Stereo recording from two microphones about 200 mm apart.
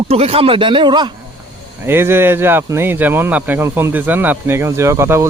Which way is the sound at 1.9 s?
10° right (ahead or behind).